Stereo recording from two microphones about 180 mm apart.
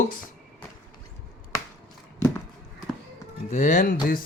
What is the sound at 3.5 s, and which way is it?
Speech, 45° left (ahead or behind).